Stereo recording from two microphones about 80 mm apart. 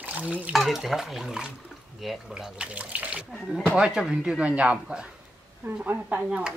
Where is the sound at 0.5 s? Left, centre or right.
Centre; by 6.3 s right.